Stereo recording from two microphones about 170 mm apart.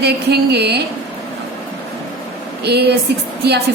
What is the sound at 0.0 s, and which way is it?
Speech, 75° right (ahead or behind).